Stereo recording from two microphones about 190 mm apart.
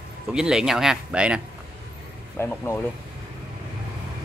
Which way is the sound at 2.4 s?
15° left (ahead or behind).